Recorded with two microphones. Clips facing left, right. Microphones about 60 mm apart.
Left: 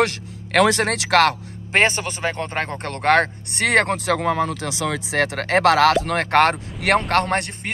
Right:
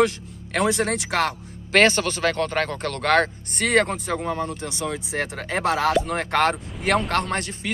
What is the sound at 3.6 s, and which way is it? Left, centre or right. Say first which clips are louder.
Speech: left 2 dB; left.